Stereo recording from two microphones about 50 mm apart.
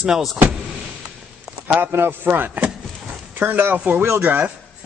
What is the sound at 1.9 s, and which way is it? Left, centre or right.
Speech, right.